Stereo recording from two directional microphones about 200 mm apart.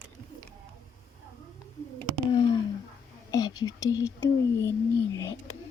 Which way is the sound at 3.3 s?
20° left (ahead or behind).